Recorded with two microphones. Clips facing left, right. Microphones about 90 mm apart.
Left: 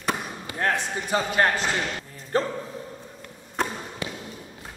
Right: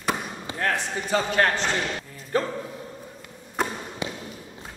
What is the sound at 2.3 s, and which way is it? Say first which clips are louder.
Speech: left 1 dB; 35° left (ahead or behind).